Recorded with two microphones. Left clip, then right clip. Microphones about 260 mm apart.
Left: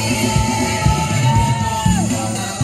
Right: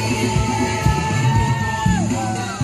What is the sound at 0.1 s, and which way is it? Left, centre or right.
Music, left.